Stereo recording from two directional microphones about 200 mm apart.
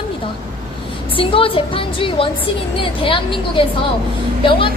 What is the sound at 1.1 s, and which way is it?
A woman's voice, 25° left (ahead or behind).